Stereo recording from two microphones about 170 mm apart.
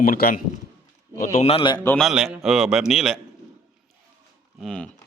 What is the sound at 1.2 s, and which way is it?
Speech, 45° left (ahead or behind).